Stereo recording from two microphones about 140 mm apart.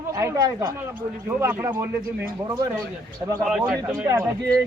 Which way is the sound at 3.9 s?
25° right (ahead or behind).